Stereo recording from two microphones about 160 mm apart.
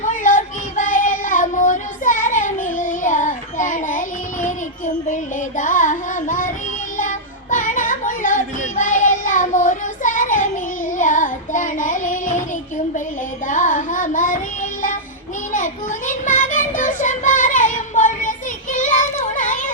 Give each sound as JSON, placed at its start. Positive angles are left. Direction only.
{"t": 0.0, "sound": "a sound", "side_deg": 55}
{"t": 5.0, "sound": "child singing", "side_deg": 50}
{"t": 6.9, "sound": "music", "side_deg": 55}
{"t": 13.5, "sound": "child singing", "side_deg": 55}